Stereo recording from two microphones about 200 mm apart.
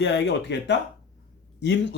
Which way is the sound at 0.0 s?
60° left (ahead or behind).